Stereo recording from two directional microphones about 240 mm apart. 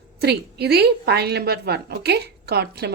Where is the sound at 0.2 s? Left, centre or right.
Right.